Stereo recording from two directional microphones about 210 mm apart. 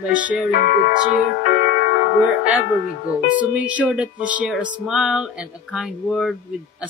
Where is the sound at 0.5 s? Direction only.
45° left (ahead or behind).